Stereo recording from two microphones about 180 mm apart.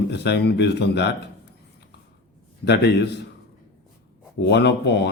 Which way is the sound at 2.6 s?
70° left (ahead or behind).